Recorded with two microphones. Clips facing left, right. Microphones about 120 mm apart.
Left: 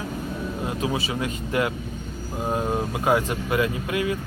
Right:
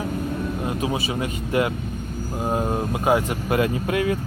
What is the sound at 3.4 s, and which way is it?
Speech, 40° right (ahead or behind).